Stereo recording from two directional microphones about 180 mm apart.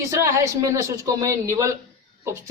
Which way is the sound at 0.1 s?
15° right (ahead or behind).